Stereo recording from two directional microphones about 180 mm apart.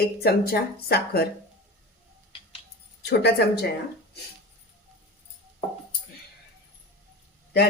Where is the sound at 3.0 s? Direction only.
65° left (ahead or behind).